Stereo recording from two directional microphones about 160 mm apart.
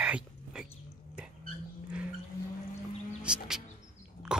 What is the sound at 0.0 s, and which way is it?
Dog, 5° right (ahead or behind).